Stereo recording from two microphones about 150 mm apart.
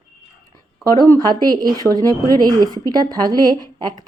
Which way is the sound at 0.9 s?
25° right (ahead or behind).